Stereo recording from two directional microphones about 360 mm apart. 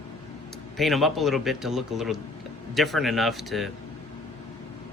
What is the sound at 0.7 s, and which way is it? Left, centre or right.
Speech, centre.